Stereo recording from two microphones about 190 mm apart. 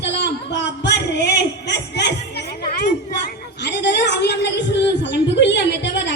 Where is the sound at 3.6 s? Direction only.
65° left (ahead or behind).